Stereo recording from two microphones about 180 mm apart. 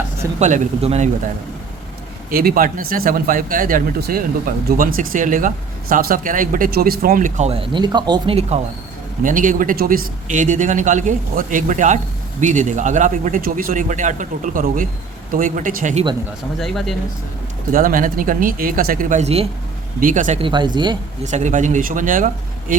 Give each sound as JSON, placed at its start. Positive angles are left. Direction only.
{"t": 0.3, "sound": "speech", "side_deg": -40}
{"t": 2.3, "sound": "speech", "side_deg": -55}
{"t": 9.2, "sound": "speech", "side_deg": -45}
{"t": 16.6, "sound": "speech", "side_deg": 0}
{"t": 17.7, "sound": "speech", "side_deg": -50}
{"t": 20.0, "sound": "speech", "side_deg": -45}
{"t": 20.4, "sound": "speech", "side_deg": -25}
{"t": 21.2, "sound": "speech", "side_deg": -40}